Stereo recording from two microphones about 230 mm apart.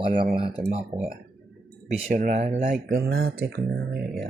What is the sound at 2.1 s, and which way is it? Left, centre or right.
Speech, right.